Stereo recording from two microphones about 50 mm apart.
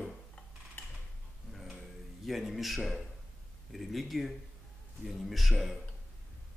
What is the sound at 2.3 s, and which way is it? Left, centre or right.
Speech, centre.